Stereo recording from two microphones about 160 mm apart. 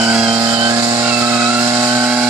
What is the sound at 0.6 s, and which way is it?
Vehicle, 20° right (ahead or behind).